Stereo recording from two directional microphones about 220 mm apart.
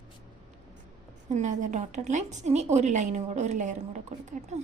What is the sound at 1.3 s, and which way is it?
A woman's voice, 35° right (ahead or behind).